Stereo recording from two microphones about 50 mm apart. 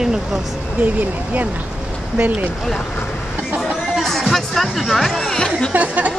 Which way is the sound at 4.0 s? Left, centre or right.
Centre.